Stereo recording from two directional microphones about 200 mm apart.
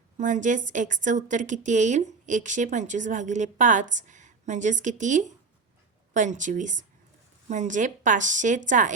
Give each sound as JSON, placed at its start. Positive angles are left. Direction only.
{"t": 0.2, "sound": "a woman's voice", "side_deg": -40}